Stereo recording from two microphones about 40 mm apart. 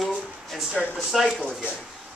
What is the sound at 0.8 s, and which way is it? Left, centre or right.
Speech, centre.